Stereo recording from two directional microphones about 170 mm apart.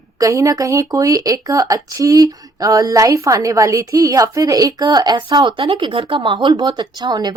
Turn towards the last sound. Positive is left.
turn(degrees=-25)  # may be behind; listen again after turning